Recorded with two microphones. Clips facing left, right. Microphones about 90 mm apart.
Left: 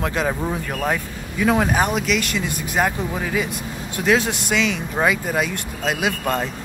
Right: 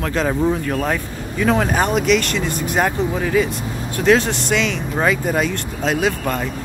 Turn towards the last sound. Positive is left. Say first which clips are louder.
# right 3 dB
turn(degrees=10)  # may be behind; listen again after turning